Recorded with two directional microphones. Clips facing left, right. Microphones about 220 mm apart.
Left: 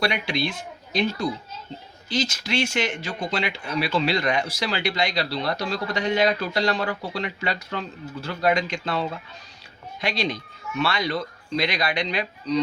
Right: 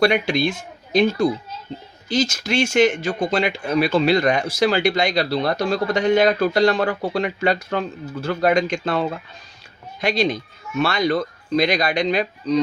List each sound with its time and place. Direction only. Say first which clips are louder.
0.0 s speech: right 7 dB; 50° right (ahead or behind)